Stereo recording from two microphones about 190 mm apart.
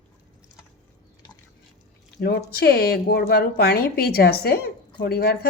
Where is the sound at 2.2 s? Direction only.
55° left (ahead or behind).